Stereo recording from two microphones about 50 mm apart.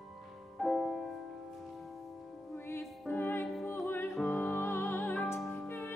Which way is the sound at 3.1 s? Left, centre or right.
Left.